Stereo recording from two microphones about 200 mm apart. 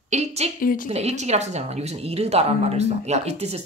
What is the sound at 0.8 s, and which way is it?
Speech, 30° right (ahead or behind).